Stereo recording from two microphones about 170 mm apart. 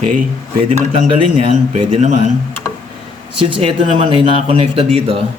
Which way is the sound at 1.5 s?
40° right (ahead or behind).